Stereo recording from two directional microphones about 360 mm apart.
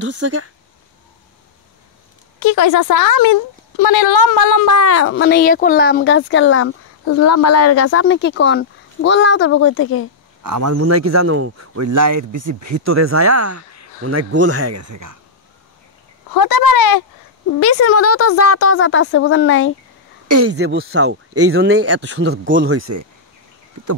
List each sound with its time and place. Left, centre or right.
0.0 s speech: right
2.4 s speech: left
10.4 s speech: right
16.3 s speech: left
17.6 s speech: left
20.2 s speech: right
20.5 s speech: right